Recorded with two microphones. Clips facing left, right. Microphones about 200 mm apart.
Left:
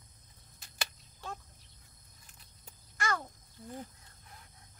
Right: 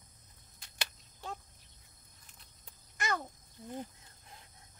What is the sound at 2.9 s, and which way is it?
Babbling, 20° right (ahead or behind).